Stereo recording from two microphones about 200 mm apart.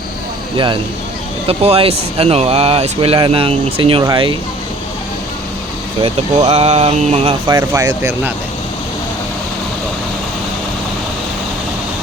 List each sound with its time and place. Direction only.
0.5 s speech: 25° right (ahead or behind)
6.0 s speech: 30° right (ahead or behind)
7.4 s speech: 15° right (ahead or behind)